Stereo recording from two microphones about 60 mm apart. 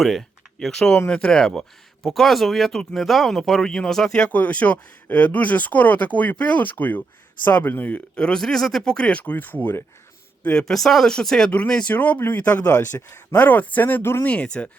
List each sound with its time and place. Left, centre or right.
0.0 s speech: centre
0.9 s speech: left
2.0 s speech: centre
4.3 s speech: left
10.4 s speech: centre
10.7 s speech: centre; by 12.6 s left
12.9 s speech: left
13.3 s speech: left
14.0 s speech: left
14.3 s speech: centre